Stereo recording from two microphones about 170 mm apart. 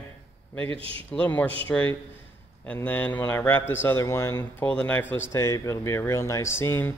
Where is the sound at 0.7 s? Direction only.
30° right (ahead or behind).